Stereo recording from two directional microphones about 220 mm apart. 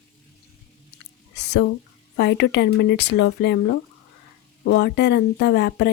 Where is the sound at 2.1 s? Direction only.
50° left (ahead or behind).